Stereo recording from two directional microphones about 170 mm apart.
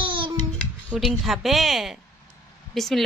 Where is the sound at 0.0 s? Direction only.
30° right (ahead or behind).